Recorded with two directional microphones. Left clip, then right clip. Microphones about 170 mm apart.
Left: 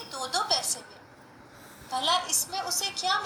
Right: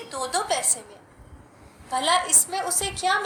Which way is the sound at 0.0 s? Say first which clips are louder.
Right 3 dB; 40° right (ahead or behind).